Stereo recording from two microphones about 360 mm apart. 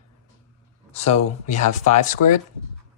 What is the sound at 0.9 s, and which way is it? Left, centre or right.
Speech, centre.